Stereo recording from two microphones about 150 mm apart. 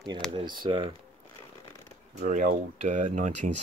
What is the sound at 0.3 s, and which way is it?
Speech, 35° right (ahead or behind).